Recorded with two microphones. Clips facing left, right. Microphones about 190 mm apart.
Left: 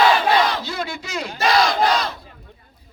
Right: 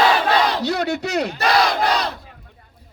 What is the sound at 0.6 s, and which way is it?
Battle cry, 70° right (ahead or behind).